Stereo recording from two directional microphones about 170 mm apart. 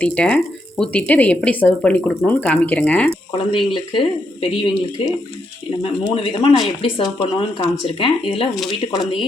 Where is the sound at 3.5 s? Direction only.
30° left (ahead or behind).